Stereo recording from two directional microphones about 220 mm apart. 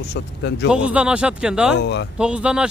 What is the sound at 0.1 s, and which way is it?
Speech, 50° left (ahead or behind).